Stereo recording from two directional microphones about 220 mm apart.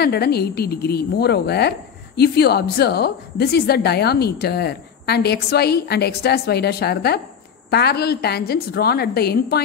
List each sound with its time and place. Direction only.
0.0 s a woman's voice: 45° left (ahead or behind)